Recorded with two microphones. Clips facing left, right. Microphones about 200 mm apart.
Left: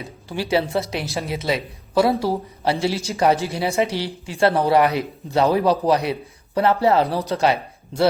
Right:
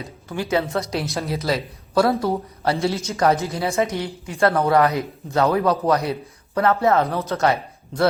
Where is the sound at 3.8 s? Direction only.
30° left (ahead or behind).